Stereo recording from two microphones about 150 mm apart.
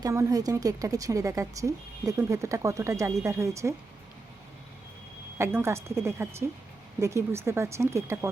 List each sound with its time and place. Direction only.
0.0 s a woman's voice: 20° right (ahead or behind)
5.4 s a woman's voice: 15° right (ahead or behind)